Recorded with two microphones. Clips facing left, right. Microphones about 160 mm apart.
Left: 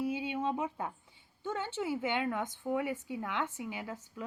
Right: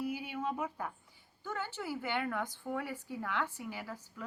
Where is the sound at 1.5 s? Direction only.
25° left (ahead or behind).